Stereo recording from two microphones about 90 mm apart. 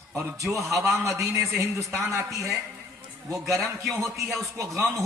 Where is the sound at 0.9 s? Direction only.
35° right (ahead or behind).